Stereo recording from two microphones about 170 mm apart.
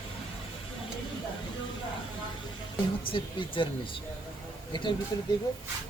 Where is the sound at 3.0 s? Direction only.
30° left (ahead or behind).